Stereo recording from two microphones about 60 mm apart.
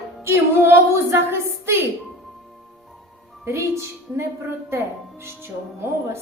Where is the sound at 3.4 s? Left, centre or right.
Right.